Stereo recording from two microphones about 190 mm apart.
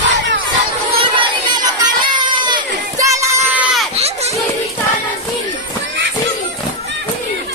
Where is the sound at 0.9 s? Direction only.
25° right (ahead or behind).